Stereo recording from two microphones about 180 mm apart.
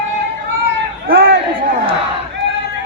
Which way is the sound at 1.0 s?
55° right (ahead or behind).